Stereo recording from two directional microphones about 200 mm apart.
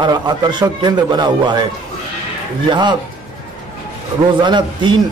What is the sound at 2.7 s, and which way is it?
Speech, 20° right (ahead or behind).